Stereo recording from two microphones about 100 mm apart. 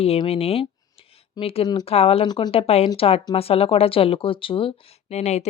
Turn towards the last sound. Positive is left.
turn(degrees=90)